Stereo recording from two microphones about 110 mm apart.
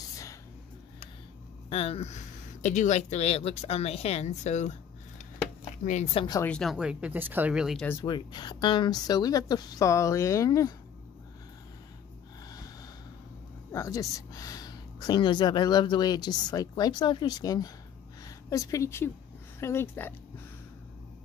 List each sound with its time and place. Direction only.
1.7 s speech: 65° left (ahead or behind); by 4.7 s 90° left
6.2 s speech: 55° left (ahead or behind)
6.6 s speech: 5° right (ahead or behind)
7.5 s speech: 5° right (ahead or behind)
8.0 s speech: 40° left (ahead or behind)
13.7 s speech: 30° left (ahead or behind)